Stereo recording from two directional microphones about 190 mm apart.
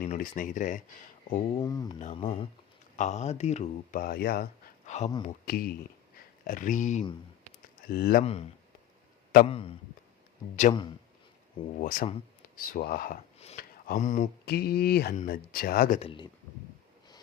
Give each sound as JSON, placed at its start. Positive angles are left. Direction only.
{"t": 0.0, "sound": "speech", "side_deg": 45}
{"t": 1.6, "sound": "speech", "side_deg": 20}
{"t": 1.9, "sound": "speech", "side_deg": 35}
{"t": 4.0, "sound": "speech", "side_deg": 50}
{"t": 4.9, "sound": "speech", "side_deg": 35}
{"t": 5.2, "sound": "speech", "side_deg": 50}
{"t": 7.9, "sound": "speech", "side_deg": 50}
{"t": 8.2, "sound": "speech", "side_deg": 30}
{"t": 9.5, "sound": "speech", "side_deg": 30}
{"t": 11.8, "sound": "speech", "side_deg": 45}
{"t": 14.4, "sound": "speech", "side_deg": 55}
{"t": 15.1, "sound": "speech", "side_deg": 45}
{"t": 16.0, "sound": "speech", "side_deg": 25}